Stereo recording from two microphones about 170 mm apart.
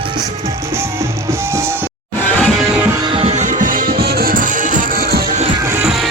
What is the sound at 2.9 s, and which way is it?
Music, 30° right (ahead or behind).